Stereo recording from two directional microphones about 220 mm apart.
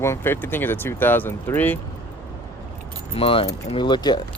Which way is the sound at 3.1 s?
25° left (ahead or behind).